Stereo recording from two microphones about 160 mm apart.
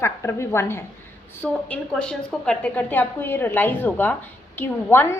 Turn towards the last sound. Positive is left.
turn(degrees=15)  # may be behind; listen again after turning